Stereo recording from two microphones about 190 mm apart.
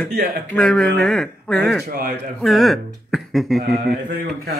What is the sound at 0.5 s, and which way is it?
Speech, 5° left (ahead or behind).